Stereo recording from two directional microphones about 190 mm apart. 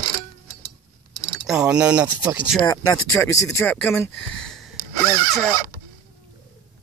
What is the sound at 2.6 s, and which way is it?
Speech, 15° left (ahead or behind).